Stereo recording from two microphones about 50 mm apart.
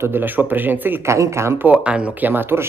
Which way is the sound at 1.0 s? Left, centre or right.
Right.